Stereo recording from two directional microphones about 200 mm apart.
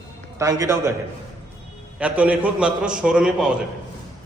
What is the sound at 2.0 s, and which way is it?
A man's voice, 5° right (ahead or behind).